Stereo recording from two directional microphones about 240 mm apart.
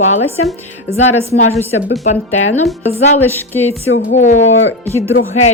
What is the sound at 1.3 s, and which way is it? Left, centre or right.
Music, left.